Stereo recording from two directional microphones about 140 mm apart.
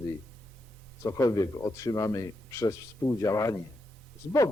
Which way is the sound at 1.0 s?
20° left (ahead or behind).